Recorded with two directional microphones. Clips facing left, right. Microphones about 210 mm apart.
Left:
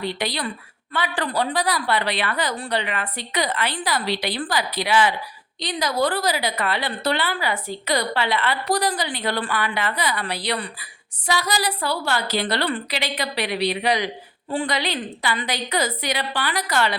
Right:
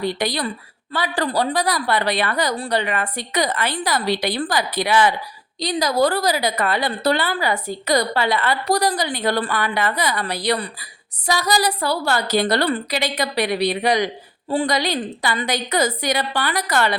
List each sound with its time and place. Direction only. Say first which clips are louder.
0.0 s a woman's voice: right 4 dB; 45° right (ahead or behind)
5.5 s a woman's voice: right 4 dB; 40° right (ahead or behind)